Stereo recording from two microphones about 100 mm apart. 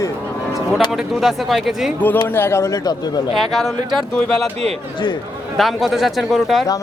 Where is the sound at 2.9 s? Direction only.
45° left (ahead or behind).